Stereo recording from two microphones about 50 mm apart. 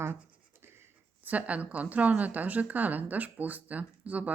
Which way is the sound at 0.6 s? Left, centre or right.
Right.